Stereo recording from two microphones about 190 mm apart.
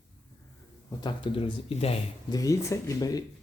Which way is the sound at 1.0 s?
25° left (ahead or behind).